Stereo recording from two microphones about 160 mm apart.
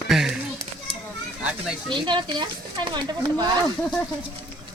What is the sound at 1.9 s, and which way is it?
Speech, 30° right (ahead or behind).